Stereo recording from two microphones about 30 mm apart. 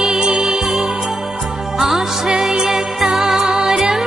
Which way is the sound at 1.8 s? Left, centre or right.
Centre.